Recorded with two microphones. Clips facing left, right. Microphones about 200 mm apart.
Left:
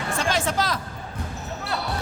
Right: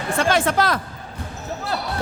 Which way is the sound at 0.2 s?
60° right (ahead or behind).